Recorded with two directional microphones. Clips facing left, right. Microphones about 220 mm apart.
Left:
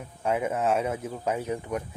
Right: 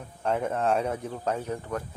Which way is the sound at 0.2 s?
10° left (ahead or behind).